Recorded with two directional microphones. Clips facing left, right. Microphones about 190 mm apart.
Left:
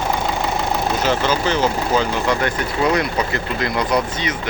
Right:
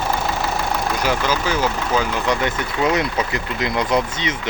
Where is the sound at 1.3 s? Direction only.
10° right (ahead or behind).